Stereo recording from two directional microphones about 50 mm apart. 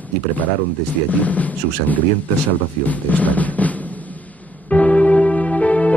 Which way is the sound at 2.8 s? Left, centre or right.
Left.